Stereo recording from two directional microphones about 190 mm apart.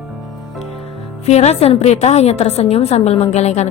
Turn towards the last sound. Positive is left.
turn(degrees=35)  # may be behind; listen again after turning